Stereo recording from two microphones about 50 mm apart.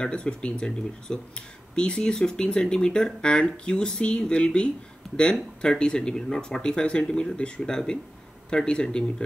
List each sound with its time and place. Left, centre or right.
0.0 s speech: centre